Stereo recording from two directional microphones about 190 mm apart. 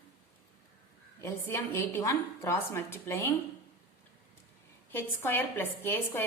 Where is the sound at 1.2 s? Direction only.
15° left (ahead or behind).